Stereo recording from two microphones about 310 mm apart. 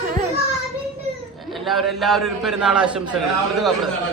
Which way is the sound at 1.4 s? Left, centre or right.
Centre.